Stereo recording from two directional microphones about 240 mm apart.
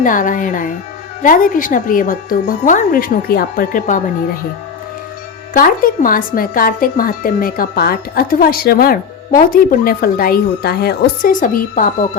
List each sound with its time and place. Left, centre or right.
0.0 s a woman's voice: left
5.5 s a woman's voice: left